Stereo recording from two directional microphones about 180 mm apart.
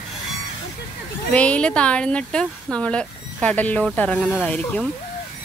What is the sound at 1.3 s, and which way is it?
Speech, 5° left (ahead or behind).